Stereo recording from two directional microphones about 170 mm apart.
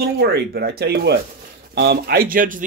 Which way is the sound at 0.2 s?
70° right (ahead or behind).